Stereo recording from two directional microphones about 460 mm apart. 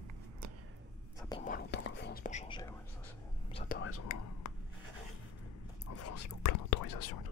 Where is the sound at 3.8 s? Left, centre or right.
Left.